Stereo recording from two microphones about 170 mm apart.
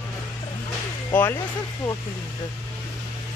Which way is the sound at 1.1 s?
10° left (ahead or behind).